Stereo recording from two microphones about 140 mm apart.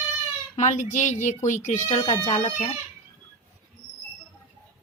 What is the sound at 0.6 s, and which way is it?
Speech, 60° left (ahead or behind).